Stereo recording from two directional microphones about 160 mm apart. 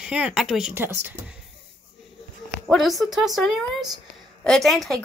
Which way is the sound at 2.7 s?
Centre (ahead or behind).